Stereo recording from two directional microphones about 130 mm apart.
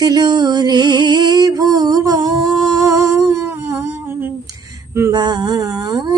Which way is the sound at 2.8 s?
20° right (ahead or behind).